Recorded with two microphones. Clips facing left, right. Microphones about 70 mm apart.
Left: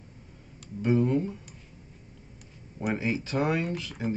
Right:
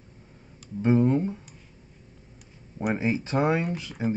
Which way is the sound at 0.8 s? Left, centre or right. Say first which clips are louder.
Right 3 dB; right.